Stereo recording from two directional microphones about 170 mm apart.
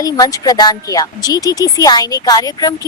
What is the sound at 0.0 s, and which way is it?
A woman's voice, 20° left (ahead or behind).